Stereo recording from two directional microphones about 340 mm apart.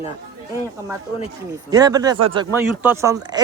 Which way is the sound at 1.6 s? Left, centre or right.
Centre.